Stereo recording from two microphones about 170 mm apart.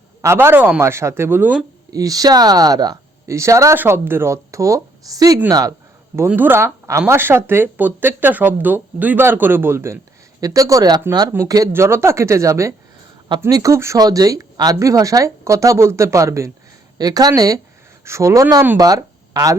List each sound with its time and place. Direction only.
0.2 s speech: 15° right (ahead or behind)
1.9 s speech: 20° right (ahead or behind)
6.1 s speech: 10° right (ahead or behind)
18.8 s speech: 20° right (ahead or behind)